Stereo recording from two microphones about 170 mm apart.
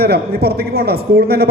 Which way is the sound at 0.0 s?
70° right (ahead or behind).